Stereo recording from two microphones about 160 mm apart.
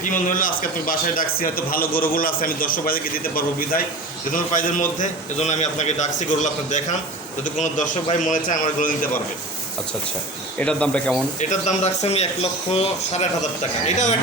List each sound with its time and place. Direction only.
0.0 s a man's voice: 55° left (ahead or behind)
8.3 s a man's voice: 55° left (ahead or behind)
10.6 s speech: 5° left (ahead or behind)
11.3 s a man's voice: 50° left (ahead or behind)